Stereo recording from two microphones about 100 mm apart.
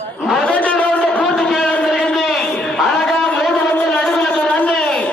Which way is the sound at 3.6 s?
10° left (ahead or behind).